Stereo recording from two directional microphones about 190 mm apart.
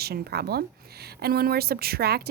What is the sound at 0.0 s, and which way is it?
A woman's voice, 55° right (ahead or behind).